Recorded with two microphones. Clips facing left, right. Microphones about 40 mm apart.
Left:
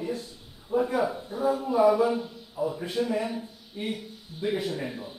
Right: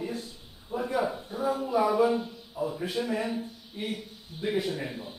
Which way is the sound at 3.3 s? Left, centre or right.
Centre.